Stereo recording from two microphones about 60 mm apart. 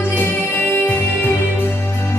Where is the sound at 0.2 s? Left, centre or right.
Left.